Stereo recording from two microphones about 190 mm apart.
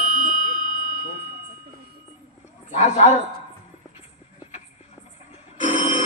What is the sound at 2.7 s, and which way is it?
Speech, 35° left (ahead or behind).